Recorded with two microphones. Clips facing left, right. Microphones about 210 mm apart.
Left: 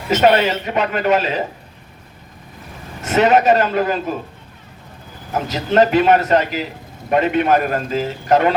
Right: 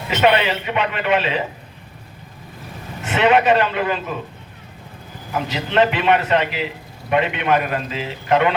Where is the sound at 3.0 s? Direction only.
40° left (ahead or behind).